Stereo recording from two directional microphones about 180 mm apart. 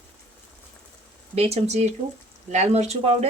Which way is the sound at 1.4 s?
35° right (ahead or behind).